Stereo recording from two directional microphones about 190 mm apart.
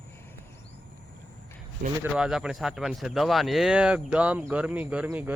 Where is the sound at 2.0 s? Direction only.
5° right (ahead or behind).